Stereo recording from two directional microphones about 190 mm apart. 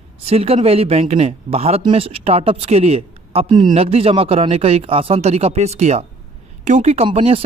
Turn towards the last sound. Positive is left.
turn(degrees=-30)  # may be behind; listen again after turning